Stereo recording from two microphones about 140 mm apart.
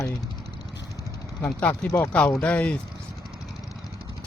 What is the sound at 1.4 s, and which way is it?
Speech, 10° left (ahead or behind).